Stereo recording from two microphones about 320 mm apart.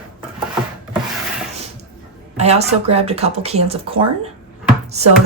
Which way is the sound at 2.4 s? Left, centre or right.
Centre.